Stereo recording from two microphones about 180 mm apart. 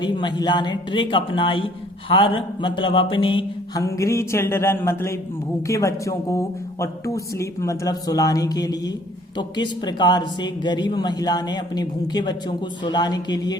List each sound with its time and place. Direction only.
0.0 s speech: 25° left (ahead or behind)